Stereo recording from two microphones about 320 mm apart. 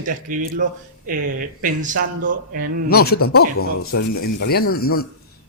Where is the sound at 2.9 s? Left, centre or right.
Left.